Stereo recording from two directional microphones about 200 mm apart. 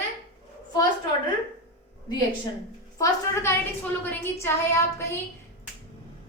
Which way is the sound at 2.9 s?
15° left (ahead or behind).